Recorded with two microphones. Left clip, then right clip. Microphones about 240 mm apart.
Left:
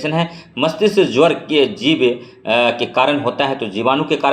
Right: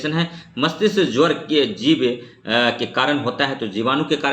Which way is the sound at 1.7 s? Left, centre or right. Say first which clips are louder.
Left 3 dB; left.